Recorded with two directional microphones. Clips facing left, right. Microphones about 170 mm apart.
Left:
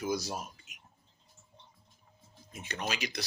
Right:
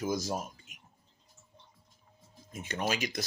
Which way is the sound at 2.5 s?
50° right (ahead or behind).